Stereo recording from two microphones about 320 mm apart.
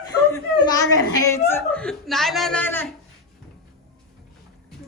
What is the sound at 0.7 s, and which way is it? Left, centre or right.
A woman's voice, centre.